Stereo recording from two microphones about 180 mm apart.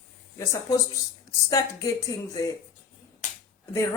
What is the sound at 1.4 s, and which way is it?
A woman's voice, 20° left (ahead or behind).